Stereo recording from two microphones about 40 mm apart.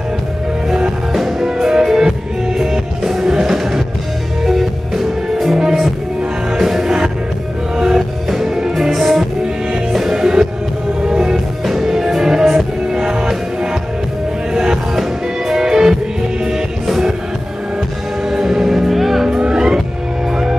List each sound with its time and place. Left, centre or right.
1.1 s music: centre
5.6 s music: centre
8.9 s music: centre
18.3 s music: centre
19.2 s vehicle: centre